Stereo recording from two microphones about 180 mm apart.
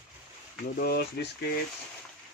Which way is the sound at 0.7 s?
60° left (ahead or behind).